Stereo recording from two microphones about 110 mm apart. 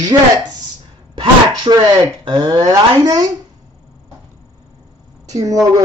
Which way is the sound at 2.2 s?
40° right (ahead or behind).